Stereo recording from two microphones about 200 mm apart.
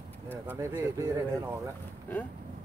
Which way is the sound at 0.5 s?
15° right (ahead or behind).